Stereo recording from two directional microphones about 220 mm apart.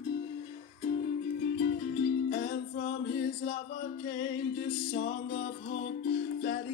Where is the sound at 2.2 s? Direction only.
55° left (ahead or behind).